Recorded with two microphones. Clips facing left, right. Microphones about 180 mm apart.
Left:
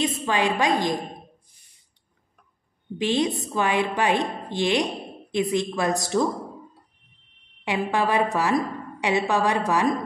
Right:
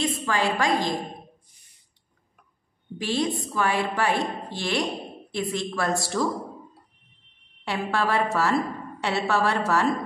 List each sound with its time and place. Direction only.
0.0 s a woman's voice: 20° left (ahead or behind)
3.0 s a woman's voice: 20° left (ahead or behind)
7.6 s a woman's voice: 15° left (ahead or behind)